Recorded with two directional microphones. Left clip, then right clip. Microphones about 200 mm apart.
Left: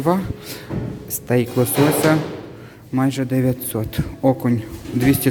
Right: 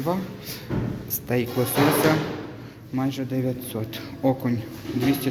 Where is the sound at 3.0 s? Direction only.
35° left (ahead or behind).